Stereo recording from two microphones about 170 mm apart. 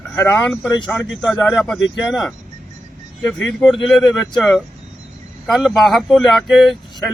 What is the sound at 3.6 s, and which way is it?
Speech, centre (ahead or behind).